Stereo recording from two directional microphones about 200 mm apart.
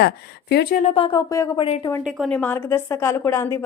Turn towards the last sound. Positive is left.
turn(degrees=15)  # may be behind; listen again after turning